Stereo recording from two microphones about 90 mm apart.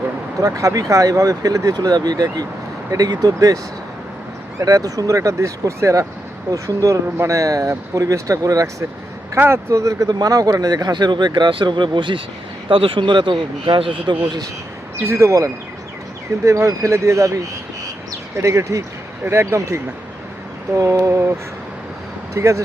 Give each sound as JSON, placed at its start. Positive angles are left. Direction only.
{"t": 0.3, "sound": "speech", "side_deg": -40}
{"t": 4.6, "sound": "speech", "side_deg": -40}
{"t": 12.6, "sound": "speech", "side_deg": -85}
{"t": 15.0, "sound": "speech", "side_deg": -30}
{"t": 22.4, "sound": "speech", "side_deg": -35}